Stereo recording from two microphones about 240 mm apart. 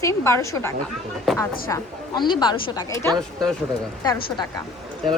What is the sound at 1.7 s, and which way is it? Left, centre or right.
Speech, centre.